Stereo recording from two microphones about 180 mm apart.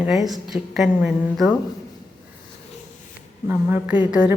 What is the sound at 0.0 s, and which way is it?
A woman's voice, centre (ahead or behind).